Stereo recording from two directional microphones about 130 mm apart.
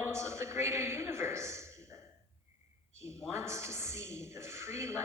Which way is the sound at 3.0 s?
20° right (ahead or behind).